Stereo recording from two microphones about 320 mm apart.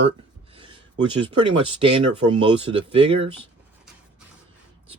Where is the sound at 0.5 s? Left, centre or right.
Centre.